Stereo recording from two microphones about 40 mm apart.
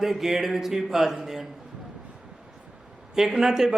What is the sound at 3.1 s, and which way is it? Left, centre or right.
Speech, centre.